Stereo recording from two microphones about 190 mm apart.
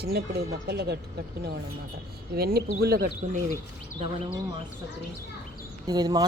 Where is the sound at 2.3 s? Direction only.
55° right (ahead or behind).